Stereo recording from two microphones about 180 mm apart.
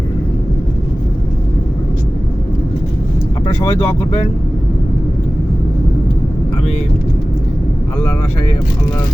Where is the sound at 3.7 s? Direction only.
35° left (ahead or behind).